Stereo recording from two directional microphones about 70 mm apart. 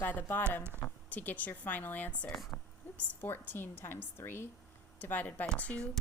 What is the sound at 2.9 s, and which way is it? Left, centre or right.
A woman's voice, left.